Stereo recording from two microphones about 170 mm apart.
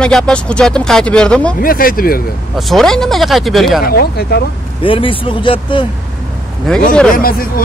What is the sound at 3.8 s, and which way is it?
Speech, 65° left (ahead or behind).